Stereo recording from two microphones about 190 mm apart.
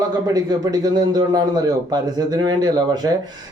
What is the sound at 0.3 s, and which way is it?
A man's voice, 20° right (ahead or behind).